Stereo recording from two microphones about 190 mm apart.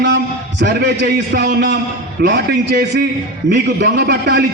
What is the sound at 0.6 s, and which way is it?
A man's voice, 60° right (ahead or behind).